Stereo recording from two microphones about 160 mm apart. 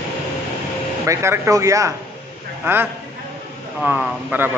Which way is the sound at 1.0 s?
15° right (ahead or behind).